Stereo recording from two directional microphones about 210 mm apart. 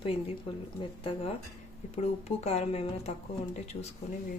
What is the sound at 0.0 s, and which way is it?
Speech, 25° left (ahead or behind).